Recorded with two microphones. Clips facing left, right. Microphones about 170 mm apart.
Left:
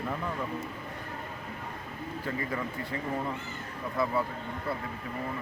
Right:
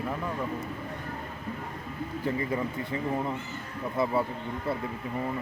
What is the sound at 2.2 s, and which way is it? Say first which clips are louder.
Speech: right 5 dB; 20° right (ahead or behind).